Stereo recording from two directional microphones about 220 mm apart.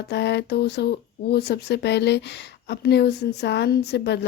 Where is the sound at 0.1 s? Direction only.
50° left (ahead or behind).